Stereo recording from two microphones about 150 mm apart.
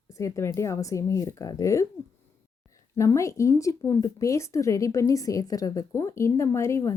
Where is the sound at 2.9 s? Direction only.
20° left (ahead or behind).